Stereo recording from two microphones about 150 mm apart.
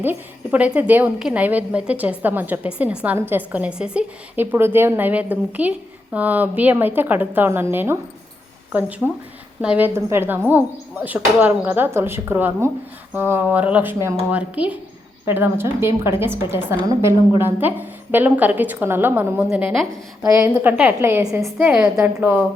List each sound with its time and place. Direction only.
0.0 s a woman's voice: 10° right (ahead or behind)
9.6 s a woman's voice: 10° right (ahead or behind)
20.2 s a woman's voice: 20° right (ahead or behind)